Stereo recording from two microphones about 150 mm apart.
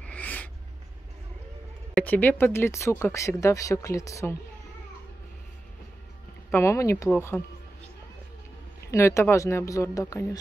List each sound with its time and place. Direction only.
0.0 s a sound: 10° left (ahead or behind)
2.0 s speech: 10° left (ahead or behind)
6.5 s speech: 20° left (ahead or behind)
8.9 s speech: 20° left (ahead or behind)